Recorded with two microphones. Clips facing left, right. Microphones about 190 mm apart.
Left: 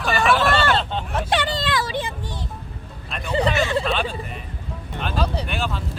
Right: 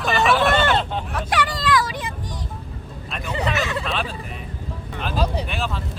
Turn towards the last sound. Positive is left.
turn(degrees=0)  # may be behind; listen again after turning